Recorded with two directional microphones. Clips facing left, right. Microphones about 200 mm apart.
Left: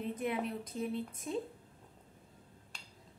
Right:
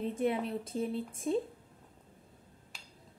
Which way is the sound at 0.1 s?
30° right (ahead or behind).